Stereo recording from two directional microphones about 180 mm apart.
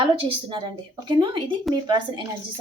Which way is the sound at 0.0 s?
25° right (ahead or behind).